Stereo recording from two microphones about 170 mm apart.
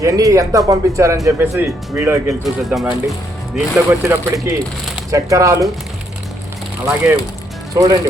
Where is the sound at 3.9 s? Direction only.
15° right (ahead or behind).